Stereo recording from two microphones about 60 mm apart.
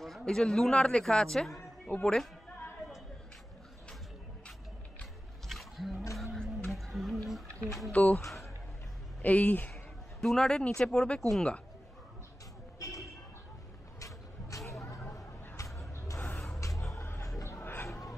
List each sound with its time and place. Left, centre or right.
0.2 s a man's voice: centre
1.9 s speech: centre
5.5 s roaring cats: centre
6.5 s a sound: centre
7.9 s speech: left
9.2 s speech: left
10.2 s a man's voice: centre
12.7 s a sound: left
13.9 s vehicle: left
14.7 s a sound: left
17.0 s music: left